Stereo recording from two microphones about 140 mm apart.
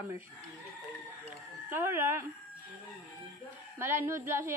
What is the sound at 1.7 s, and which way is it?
Speech, 15° right (ahead or behind).